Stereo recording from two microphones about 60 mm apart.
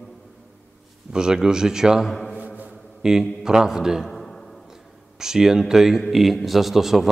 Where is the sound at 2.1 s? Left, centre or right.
Centre.